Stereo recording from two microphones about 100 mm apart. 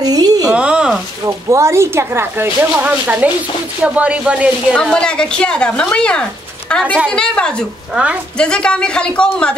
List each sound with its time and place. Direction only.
0.0 s a sound: 40° right (ahead or behind)
0.5 s a sound: 10° right (ahead or behind)
1.2 s a woman's voice: 30° right (ahead or behind); by 4.5 s 10° right (ahead or behind)
4.9 s speech: 10° left (ahead or behind)
7.9 s speech: 15° right (ahead or behind)
8.4 s speech: 10° left (ahead or behind)